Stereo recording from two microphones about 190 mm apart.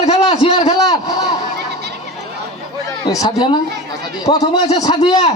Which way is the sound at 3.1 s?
20° left (ahead or behind).